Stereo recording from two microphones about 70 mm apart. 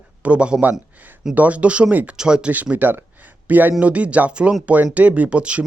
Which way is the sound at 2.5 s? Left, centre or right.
Right.